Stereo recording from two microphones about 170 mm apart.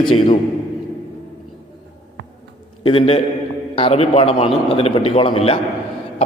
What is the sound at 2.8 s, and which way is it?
A man's voice, 35° left (ahead or behind).